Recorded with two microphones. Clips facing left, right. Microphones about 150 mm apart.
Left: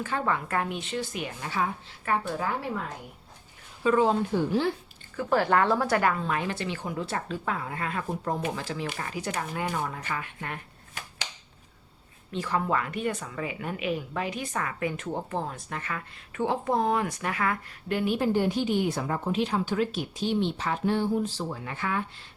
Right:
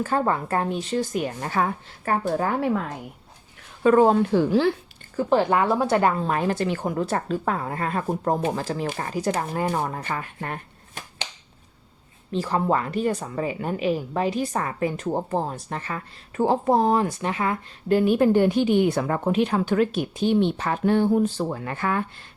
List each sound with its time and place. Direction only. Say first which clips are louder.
0.0 s a woman's voice: right 6 dB; 40° right (ahead or behind); by 2.8 s 55° right (ahead or behind)
3.8 s speech: right 6 dB; 50° right (ahead or behind)
4.3 s speech: right 6 dB; 90° right
5.3 s a woman's voice: right 3 dB; 20° right (ahead or behind); by 10.6 s 40° right (ahead or behind)
12.3 s a woman's voice: right 5 dB; 35° right (ahead or behind); by 22.3 s 50° right (ahead or behind)